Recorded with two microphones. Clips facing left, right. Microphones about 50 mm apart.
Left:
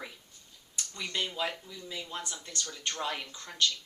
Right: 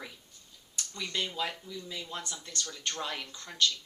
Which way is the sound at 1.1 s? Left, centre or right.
Centre.